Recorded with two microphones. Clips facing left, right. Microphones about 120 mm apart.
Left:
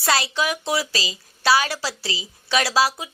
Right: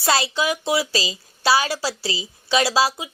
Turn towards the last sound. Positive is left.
turn(degrees=-20)  # may be behind; listen again after turning